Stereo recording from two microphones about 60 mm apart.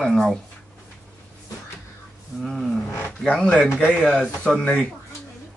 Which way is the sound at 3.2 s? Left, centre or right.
Centre.